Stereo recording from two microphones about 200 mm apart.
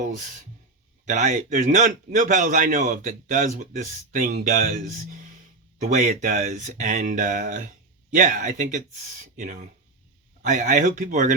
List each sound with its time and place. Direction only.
1.0 s a man's voice: 35° right (ahead or behind)
6.0 s a man's voice: 40° right (ahead or behind)